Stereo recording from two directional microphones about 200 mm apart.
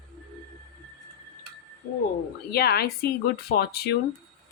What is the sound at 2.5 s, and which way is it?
Speech, 50° left (ahead or behind).